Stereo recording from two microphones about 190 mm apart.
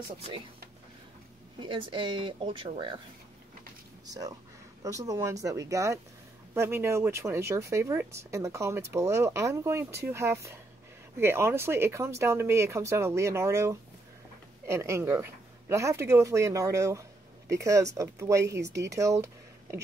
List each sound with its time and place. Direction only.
1.6 s speech: 25° right (ahead or behind)
4.0 s speech: 20° right (ahead or behind)